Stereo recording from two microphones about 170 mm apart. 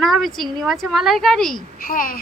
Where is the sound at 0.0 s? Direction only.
Centre (ahead or behind).